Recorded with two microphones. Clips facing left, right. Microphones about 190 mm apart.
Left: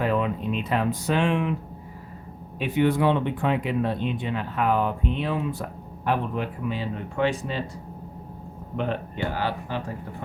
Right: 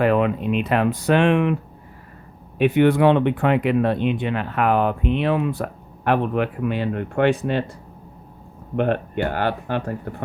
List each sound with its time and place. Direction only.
0.0 s speech: 70° right (ahead or behind)
2.6 s speech: 65° right (ahead or behind)
8.7 s speech: 60° right (ahead or behind)